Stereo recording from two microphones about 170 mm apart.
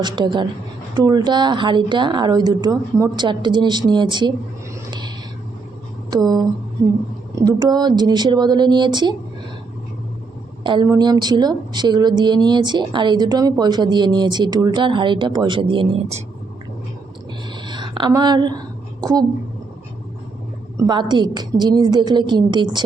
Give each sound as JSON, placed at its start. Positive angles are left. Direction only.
{"t": 0.0, "sound": "speech", "side_deg": -25}
{"t": 10.6, "sound": "speech", "side_deg": -30}
{"t": 17.7, "sound": "a woman's voice", "side_deg": -30}
{"t": 20.7, "sound": "speech", "side_deg": -25}